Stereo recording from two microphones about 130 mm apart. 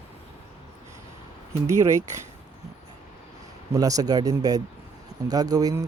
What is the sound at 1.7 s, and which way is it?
Speech, 25° right (ahead or behind).